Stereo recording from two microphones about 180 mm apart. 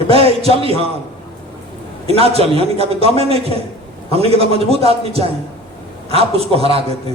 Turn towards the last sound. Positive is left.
turn(degrees=-30)  # may be behind; listen again after turning